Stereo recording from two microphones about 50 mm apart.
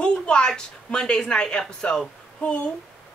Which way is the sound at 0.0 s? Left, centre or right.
Centre.